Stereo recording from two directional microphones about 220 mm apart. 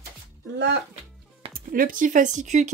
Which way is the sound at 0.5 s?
50° right (ahead or behind).